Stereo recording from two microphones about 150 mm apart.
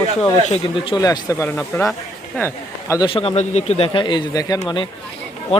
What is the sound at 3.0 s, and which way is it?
Speech, 40° left (ahead or behind).